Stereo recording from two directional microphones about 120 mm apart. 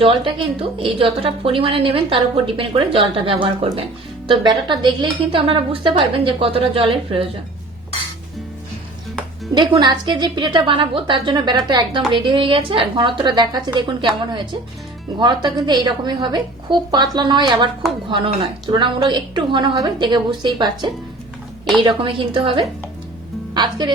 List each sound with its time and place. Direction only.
0.0 s a woman's voice: 45° right (ahead or behind)
9.6 s a woman's voice: 40° right (ahead or behind)
15.2 s a woman's voice: 40° right (ahead or behind)